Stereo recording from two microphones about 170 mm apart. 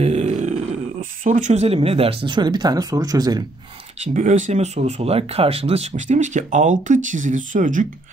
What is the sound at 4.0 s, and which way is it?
Speech, 45° right (ahead or behind).